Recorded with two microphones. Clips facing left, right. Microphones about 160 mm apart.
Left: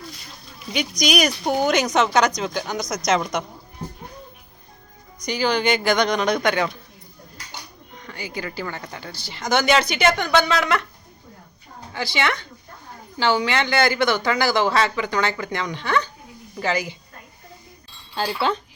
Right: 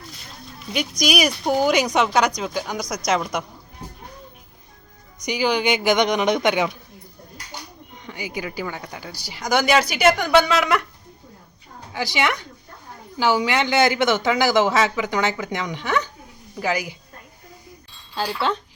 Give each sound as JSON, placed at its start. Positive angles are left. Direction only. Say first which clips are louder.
{"t": 0.7, "sound": "speech", "louder": "even", "side_deg": -5}
{"t": 5.2, "sound": "speech", "louder": "even", "side_deg": -15}
{"t": 7.9, "sound": "speech", "louder": "right 1 dB", "side_deg": -15}
{"t": 11.9, "sound": "speech", "louder": "right 1 dB", "side_deg": -15}
{"t": 18.1, "sound": "speech", "louder": "left 1 dB", "side_deg": 5}